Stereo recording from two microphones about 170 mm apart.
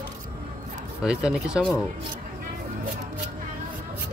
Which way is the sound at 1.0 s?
5° right (ahead or behind).